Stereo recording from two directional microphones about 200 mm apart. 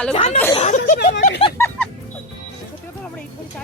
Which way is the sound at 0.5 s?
35° left (ahead or behind).